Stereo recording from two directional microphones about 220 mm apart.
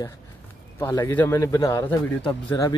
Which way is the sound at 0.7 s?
10° left (ahead or behind).